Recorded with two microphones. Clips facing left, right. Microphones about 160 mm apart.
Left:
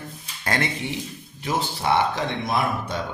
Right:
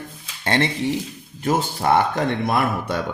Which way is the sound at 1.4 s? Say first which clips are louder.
Right 5 dB; 50° right (ahead or behind).